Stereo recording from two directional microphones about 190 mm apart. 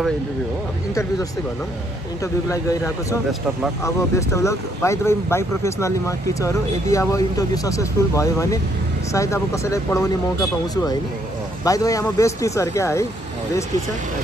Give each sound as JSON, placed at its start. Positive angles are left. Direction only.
{"t": 2.5, "sound": "speech", "side_deg": 15}
{"t": 11.6, "sound": "speech", "side_deg": 15}